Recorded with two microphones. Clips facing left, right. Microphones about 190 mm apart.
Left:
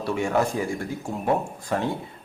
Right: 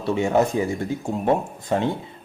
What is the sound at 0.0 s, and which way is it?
A man's voice, 20° right (ahead or behind).